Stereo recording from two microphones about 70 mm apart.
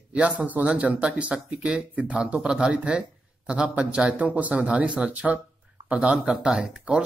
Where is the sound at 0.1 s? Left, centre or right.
Centre.